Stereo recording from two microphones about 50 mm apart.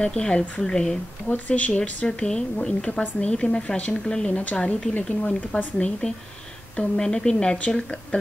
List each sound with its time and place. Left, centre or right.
0.0 s speech: left
1.3 s speech: left
3.9 s a woman's voice: centre
4.3 s speech: left
5.0 s a woman's voice: centre